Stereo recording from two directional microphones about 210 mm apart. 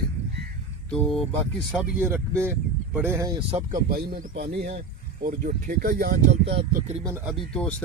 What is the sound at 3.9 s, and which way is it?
Speech, 45° right (ahead or behind).